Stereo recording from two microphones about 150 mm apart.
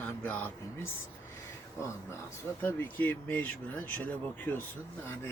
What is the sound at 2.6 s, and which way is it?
Speech, 15° left (ahead or behind).